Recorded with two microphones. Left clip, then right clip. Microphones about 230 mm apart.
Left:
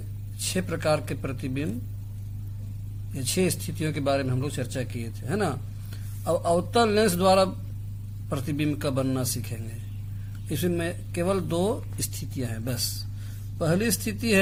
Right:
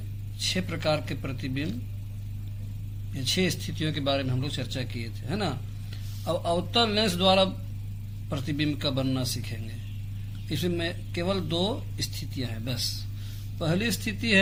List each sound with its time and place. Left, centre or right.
0.4 s a man's voice: left
3.2 s a man's voice: left
10.6 s a man's voice: left